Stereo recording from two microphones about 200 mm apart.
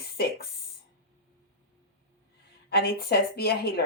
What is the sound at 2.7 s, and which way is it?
Speech, 50° left (ahead or behind).